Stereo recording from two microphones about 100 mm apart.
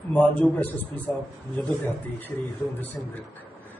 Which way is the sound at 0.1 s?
15° left (ahead or behind).